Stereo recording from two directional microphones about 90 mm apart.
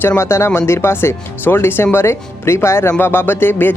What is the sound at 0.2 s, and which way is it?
Speech, 30° left (ahead or behind).